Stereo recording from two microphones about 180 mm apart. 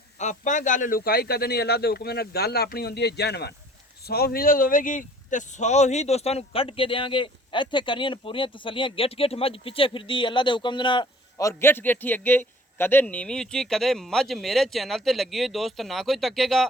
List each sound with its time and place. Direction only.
0.2 s speech: 40° left (ahead or behind); by 16.6 s centre (ahead or behind)